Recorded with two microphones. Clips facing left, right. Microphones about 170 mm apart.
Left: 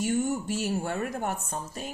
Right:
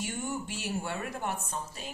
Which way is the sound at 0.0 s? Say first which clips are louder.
Left 8 dB; 45° left (ahead or behind).